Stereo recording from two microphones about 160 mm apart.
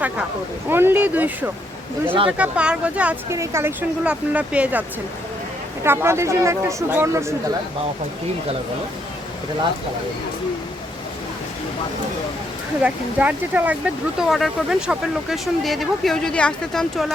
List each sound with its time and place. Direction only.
0.7 s speech: 15° right (ahead or behind)
12.8 s speech: 10° right (ahead or behind)